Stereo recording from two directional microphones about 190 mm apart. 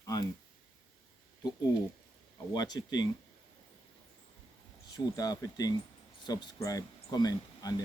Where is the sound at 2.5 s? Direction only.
20° left (ahead or behind).